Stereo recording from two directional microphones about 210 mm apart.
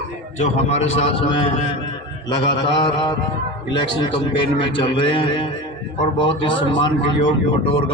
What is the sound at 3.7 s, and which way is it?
A man's voice, 20° left (ahead or behind).